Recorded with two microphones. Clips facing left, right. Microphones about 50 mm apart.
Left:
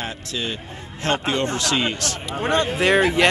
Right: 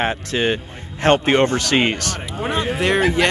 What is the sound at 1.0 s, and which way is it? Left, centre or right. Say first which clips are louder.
Speech: right 7 dB; right.